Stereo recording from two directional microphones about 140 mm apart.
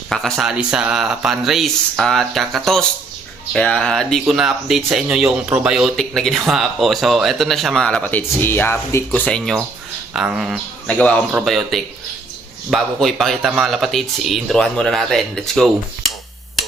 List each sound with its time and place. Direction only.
0.1 s speech: 5° left (ahead or behind)
10.2 s speech: 5° right (ahead or behind)
10.8 s a man's voice: 10° left (ahead or behind)